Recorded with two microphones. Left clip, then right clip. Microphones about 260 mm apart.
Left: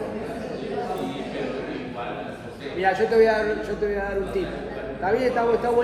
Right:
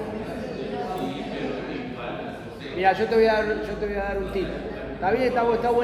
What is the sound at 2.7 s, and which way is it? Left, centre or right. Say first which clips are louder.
Speech: left 1 dB; right.